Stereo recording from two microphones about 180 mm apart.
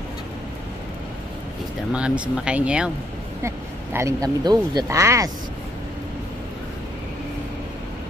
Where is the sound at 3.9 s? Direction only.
15° right (ahead or behind).